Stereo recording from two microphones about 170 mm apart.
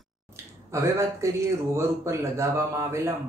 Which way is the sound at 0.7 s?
15° right (ahead or behind).